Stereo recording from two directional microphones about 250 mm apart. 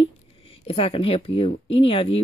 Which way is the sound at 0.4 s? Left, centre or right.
Left.